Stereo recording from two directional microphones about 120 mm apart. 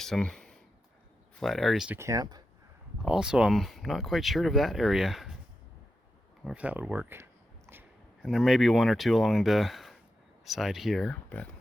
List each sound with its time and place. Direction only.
0.0 s a sound: 5° left (ahead or behind)
1.4 s speech: 5° left (ahead or behind)
1.9 s speech: 25° right (ahead or behind)
3.0 s speech: 5° right (ahead or behind)
6.4 s speech: 10° right (ahead or behind)
8.2 s speech: centre (ahead or behind)